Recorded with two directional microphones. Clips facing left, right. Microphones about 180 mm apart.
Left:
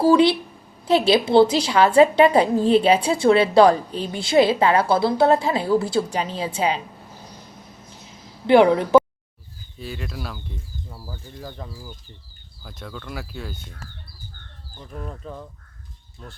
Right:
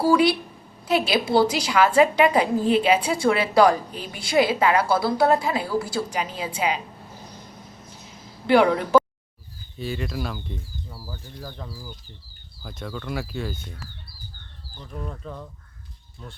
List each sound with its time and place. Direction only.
0.0 s a woman's voice: 25° left (ahead or behind)
8.4 s a woman's voice: 20° left (ahead or behind)
9.7 s speech: centre (ahead or behind)
15.0 s speech: 5° left (ahead or behind)